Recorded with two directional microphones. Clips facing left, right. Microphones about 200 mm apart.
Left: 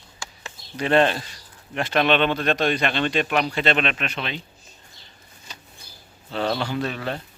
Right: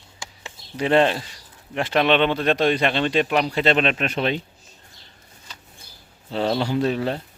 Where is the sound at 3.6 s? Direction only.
35° right (ahead or behind).